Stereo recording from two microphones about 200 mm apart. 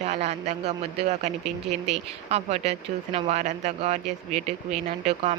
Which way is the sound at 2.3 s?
35° right (ahead or behind).